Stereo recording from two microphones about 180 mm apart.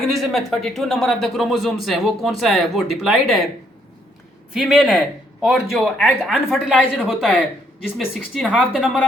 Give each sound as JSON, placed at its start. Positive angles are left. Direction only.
{"t": 0.0, "sound": "speech", "side_deg": 0}
{"t": 4.5, "sound": "speech", "side_deg": 0}